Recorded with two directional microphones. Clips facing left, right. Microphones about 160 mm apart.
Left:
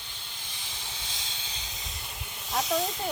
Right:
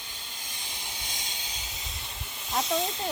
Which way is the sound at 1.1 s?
15° right (ahead or behind).